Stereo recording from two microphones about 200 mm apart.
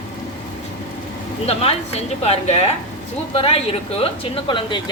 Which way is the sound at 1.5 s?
30° left (ahead or behind).